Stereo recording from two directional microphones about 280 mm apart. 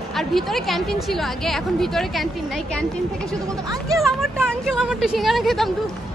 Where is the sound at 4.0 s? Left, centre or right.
Centre.